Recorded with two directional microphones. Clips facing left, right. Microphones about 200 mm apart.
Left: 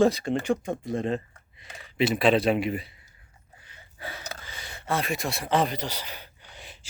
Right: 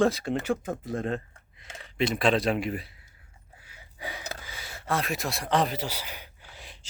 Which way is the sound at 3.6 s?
10° right (ahead or behind).